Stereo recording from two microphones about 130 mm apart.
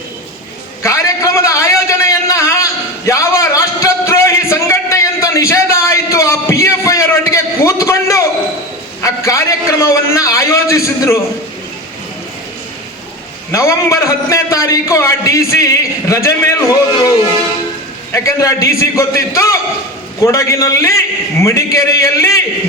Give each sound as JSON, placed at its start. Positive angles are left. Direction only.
{"t": 0.8, "sound": "a sound", "side_deg": 25}
{"t": 9.0, "sound": "a man's voice", "side_deg": 25}
{"t": 13.5, "sound": "a man's voice", "side_deg": 20}